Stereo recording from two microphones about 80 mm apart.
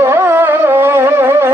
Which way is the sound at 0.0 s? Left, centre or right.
Right.